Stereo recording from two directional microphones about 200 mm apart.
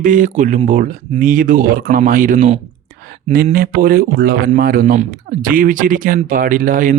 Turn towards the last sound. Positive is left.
turn(degrees=-40)  # may be behind; listen again after turning